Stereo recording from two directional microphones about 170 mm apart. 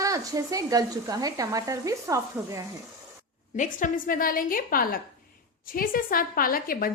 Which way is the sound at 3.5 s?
50° left (ahead or behind).